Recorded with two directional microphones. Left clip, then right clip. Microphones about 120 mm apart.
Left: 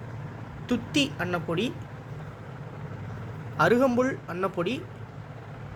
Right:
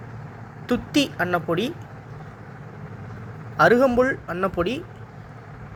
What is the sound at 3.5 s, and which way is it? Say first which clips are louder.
A man's voice: right 6 dB; 35° right (ahead or behind).